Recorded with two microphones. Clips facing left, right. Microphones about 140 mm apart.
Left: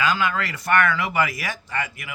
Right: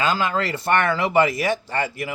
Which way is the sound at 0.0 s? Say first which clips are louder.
Right 1 dB; 30° right (ahead or behind).